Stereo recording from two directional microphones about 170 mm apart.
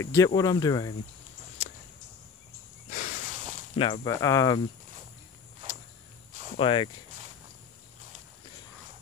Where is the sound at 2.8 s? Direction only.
50° left (ahead or behind).